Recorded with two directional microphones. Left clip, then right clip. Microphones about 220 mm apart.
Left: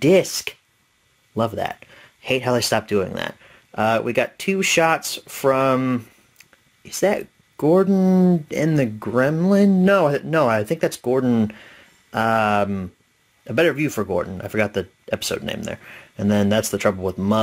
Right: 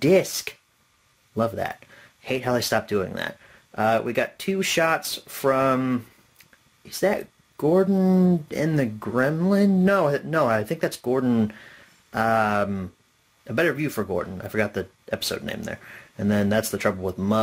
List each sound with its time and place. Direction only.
0.0 s speech: 25° left (ahead or behind)